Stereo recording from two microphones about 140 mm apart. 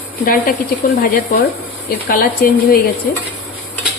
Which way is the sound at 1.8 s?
90° left.